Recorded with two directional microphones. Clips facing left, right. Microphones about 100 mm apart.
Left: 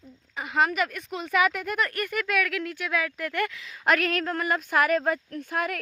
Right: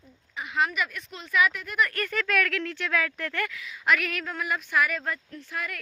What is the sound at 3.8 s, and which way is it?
Speech, 40° left (ahead or behind).